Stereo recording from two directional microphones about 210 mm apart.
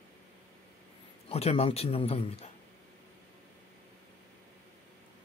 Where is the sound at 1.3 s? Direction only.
30° left (ahead or behind).